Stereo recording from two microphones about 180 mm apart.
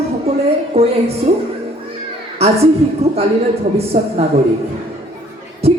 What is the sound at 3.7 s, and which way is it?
Speech, 35° right (ahead or behind).